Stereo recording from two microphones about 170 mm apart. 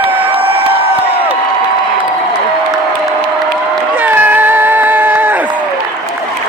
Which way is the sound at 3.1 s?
5° right (ahead or behind).